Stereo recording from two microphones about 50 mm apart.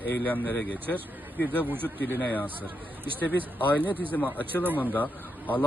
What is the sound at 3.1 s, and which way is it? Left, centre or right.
Speech, left.